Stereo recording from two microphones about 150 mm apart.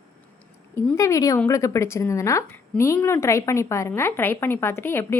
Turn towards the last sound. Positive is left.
turn(degrees=15)  # may be behind; listen again after turning